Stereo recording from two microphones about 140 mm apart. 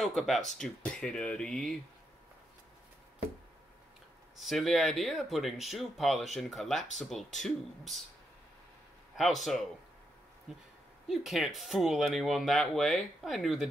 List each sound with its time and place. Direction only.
0.0 s speech: centre (ahead or behind)
4.4 s speech: centre (ahead or behind)
9.1 s speech: centre (ahead or behind)
11.1 s speech: centre (ahead or behind)